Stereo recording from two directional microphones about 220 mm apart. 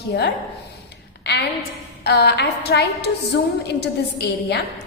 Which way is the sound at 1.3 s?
50° left (ahead or behind).